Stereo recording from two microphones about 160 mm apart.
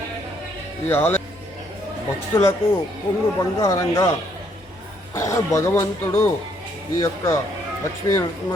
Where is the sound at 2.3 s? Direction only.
15° left (ahead or behind).